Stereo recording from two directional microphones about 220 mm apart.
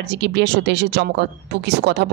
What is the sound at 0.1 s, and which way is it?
Speech, 50° right (ahead or behind).